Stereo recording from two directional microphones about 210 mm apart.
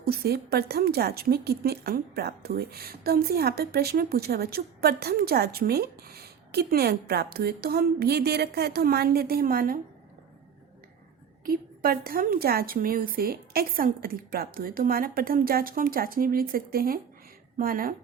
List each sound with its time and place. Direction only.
0.0 s a woman's voice: 45° right (ahead or behind)
11.4 s a woman's voice: 45° right (ahead or behind)